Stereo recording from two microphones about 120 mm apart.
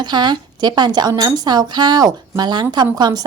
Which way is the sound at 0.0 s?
40° right (ahead or behind).